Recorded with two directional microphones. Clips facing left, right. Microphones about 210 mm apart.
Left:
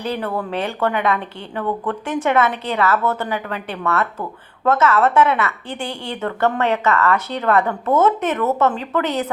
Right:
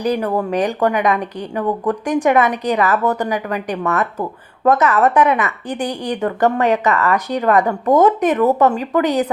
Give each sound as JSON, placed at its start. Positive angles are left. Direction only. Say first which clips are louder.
{"t": 0.0, "sound": "speech", "louder": "right 5 dB", "side_deg": -15}